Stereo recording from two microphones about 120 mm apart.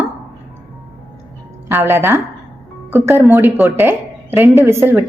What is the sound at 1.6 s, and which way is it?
A woman's voice, 15° right (ahead or behind).